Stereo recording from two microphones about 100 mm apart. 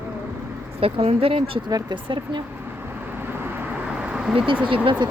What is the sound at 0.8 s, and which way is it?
Speech, 75° right (ahead or behind).